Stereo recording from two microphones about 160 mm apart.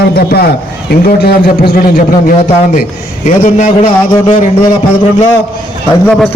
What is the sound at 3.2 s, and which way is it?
Speech, 50° left (ahead or behind).